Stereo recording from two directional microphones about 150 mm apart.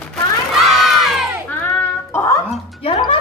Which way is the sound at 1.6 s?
10° left (ahead or behind).